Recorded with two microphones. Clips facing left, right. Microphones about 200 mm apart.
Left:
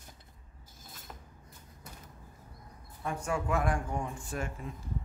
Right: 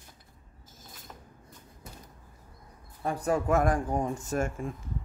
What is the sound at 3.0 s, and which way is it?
Speech, 35° right (ahead or behind).